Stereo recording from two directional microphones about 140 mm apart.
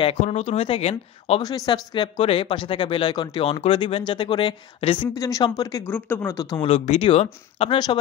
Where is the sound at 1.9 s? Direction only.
35° left (ahead or behind).